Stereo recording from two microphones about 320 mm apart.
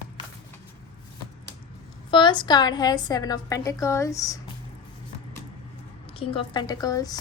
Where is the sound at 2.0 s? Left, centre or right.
Centre.